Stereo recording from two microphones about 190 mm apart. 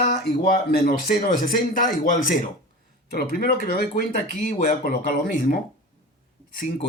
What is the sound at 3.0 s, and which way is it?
Speech, 55° left (ahead or behind).